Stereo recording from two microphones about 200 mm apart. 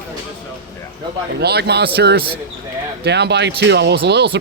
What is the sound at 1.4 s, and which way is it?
Speech, 55° right (ahead or behind).